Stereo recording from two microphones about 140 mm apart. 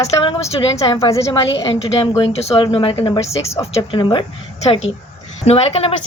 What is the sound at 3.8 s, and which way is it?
Speech, 30° left (ahead or behind).